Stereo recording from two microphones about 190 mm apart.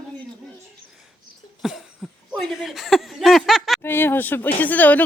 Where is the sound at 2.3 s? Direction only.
Centre (ahead or behind).